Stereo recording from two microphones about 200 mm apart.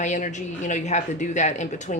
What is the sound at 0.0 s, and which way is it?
A woman's voice, 35° left (ahead or behind).